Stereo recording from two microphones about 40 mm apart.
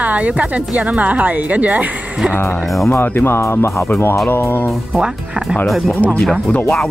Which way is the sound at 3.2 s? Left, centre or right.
Left.